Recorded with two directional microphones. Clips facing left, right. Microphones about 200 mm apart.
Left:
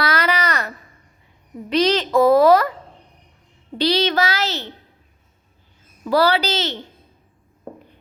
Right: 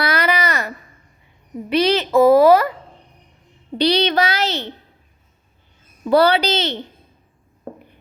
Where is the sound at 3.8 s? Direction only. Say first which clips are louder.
Right 2 dB; 15° right (ahead or behind).